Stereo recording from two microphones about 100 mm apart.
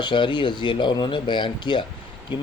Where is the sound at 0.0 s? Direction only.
50° left (ahead or behind).